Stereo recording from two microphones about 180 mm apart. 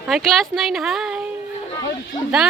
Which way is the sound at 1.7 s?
20° left (ahead or behind).